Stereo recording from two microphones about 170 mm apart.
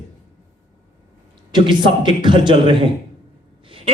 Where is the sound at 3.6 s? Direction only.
30° right (ahead or behind).